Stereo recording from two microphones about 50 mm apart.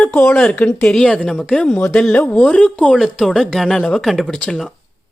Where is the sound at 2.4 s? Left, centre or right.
Centre.